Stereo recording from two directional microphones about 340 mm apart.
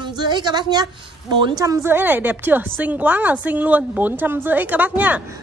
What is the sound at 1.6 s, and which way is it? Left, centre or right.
A woman's voice, centre.